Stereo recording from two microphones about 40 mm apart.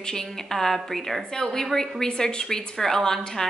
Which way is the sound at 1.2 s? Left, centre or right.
Centre.